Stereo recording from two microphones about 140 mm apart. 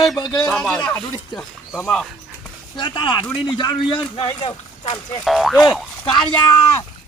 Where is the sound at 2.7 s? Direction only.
30° left (ahead or behind).